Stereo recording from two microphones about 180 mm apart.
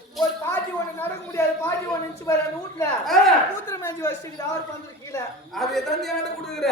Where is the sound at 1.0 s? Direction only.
15° left (ahead or behind).